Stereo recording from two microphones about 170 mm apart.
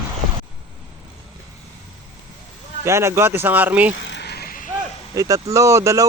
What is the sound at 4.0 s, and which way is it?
Vehicle, 85° left.